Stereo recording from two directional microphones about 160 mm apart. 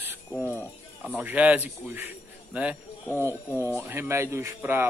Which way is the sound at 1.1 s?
10° right (ahead or behind).